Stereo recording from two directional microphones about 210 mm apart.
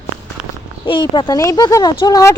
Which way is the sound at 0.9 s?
20° left (ahead or behind).